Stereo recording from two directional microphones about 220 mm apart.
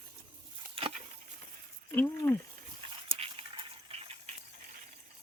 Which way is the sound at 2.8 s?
25° right (ahead or behind).